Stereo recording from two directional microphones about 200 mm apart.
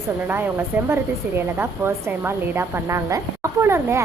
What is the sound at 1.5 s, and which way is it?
Speech, 10° right (ahead or behind).